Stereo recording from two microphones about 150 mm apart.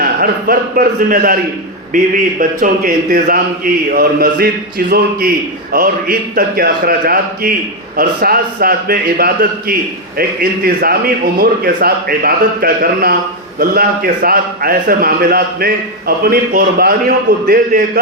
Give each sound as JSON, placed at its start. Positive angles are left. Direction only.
{"t": 0.0, "sound": "a man's voice", "side_deg": -75}
{"t": 2.4, "sound": "a man's voice", "side_deg": -70}